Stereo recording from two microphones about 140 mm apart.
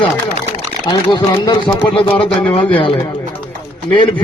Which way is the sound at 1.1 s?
35° left (ahead or behind).